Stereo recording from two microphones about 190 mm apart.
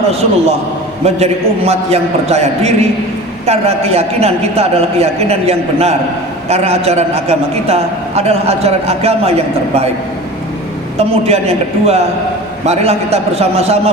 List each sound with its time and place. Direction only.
0.1 s a man's voice: 30° right (ahead or behind)
10.9 s a man's voice: 35° right (ahead or behind)